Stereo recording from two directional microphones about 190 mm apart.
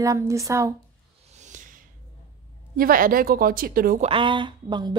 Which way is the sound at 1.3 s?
40° right (ahead or behind).